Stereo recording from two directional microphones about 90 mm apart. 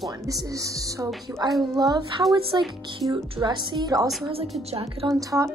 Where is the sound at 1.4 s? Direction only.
50° right (ahead or behind).